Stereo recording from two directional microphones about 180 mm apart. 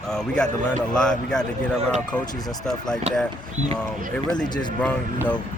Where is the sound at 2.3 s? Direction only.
20° left (ahead or behind).